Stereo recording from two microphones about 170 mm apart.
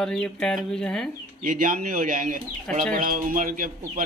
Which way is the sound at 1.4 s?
50° right (ahead or behind).